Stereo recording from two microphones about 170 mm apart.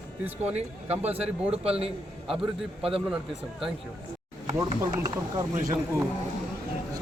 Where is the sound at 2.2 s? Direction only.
5° right (ahead or behind).